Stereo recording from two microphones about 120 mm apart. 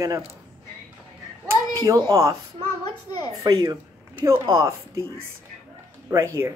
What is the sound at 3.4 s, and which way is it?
Speech, 30° right (ahead or behind).